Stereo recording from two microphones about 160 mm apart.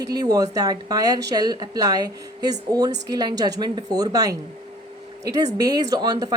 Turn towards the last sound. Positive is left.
turn(degrees=-25)  # may be behind; listen again after turning